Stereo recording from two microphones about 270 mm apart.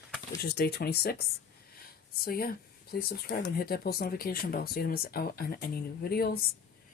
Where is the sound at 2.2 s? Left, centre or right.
Left.